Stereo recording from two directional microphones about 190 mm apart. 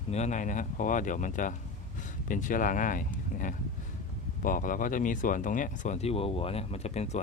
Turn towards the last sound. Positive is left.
turn(degrees=35)  # may be behind; listen again after turning